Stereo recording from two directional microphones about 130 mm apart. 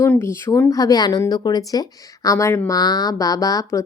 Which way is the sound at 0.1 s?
20° left (ahead or behind).